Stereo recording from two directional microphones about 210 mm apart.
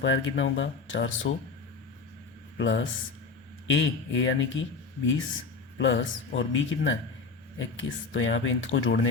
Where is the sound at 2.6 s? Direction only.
60° left (ahead or behind).